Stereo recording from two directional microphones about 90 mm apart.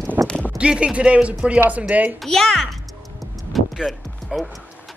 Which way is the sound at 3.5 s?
Centre (ahead or behind).